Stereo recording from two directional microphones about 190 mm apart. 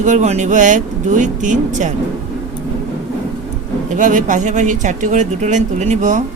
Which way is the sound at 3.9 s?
40° right (ahead or behind).